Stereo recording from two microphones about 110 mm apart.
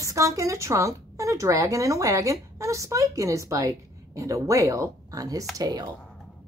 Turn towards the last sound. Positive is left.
turn(degrees=-35)  # may be behind; listen again after turning